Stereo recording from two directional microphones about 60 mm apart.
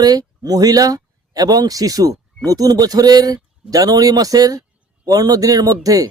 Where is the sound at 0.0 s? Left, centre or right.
Right.